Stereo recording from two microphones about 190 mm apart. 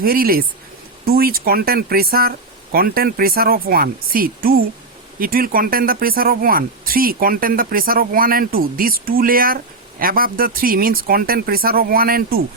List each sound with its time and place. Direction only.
0.0 s speech: 50° right (ahead or behind)